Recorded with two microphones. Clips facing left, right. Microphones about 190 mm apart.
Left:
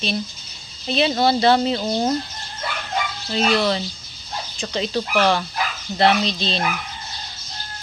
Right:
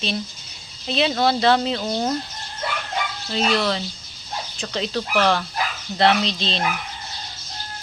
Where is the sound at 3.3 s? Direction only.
Centre (ahead or behind).